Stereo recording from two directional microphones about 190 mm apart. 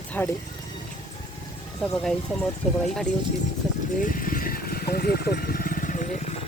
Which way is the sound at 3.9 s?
45° left (ahead or behind).